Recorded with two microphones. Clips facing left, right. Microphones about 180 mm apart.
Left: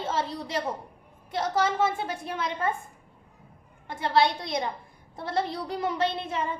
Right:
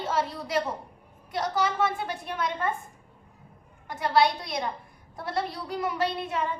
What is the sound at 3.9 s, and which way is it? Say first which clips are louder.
A woman's voice: right 1 dB; 25° left (ahead or behind).